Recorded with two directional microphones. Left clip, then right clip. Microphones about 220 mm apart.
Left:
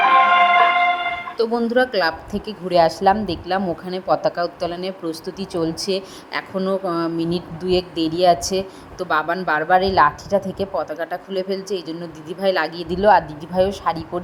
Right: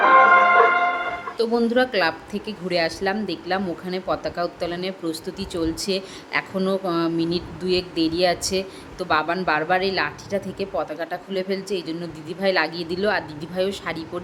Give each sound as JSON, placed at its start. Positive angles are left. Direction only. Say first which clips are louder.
{"t": 0.2, "sound": "music", "louder": "even", "side_deg": -20}
{"t": 1.4, "sound": "speech", "louder": "left 2 dB", "side_deg": 10}